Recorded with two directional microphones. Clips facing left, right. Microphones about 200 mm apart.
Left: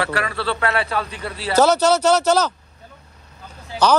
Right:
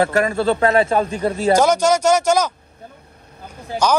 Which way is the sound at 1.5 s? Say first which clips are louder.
Even; 10° right (ahead or behind).